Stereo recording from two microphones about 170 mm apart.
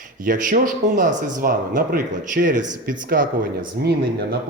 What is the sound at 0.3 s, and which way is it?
Speech, 50° right (ahead or behind).